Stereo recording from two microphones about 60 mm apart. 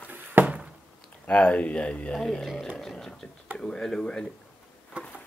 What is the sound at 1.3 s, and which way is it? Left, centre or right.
Speech, left.